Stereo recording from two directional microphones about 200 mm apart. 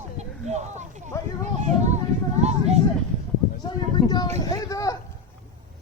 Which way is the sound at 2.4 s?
30° right (ahead or behind).